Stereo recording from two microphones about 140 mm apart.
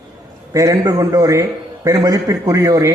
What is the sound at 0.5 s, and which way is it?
A man's voice, 25° right (ahead or behind).